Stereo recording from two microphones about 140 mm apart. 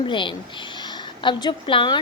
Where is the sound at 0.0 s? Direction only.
35° left (ahead or behind).